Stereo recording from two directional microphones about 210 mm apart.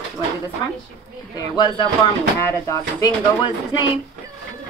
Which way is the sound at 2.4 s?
15° left (ahead or behind).